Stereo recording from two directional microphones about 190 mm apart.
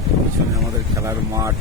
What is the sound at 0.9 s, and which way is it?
Speech, 15° right (ahead or behind).